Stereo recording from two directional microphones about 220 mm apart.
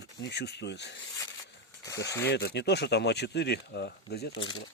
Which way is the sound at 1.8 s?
15° left (ahead or behind).